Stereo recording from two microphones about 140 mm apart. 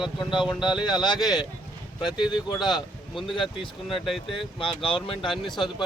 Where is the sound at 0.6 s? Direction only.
35° left (ahead or behind).